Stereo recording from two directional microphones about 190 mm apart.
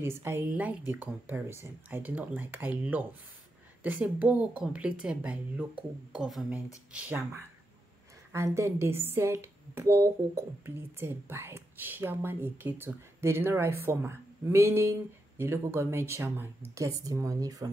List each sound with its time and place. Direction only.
0.0 s a woman's voice: 15° right (ahead or behind)
8.5 s speech: 15° right (ahead or behind)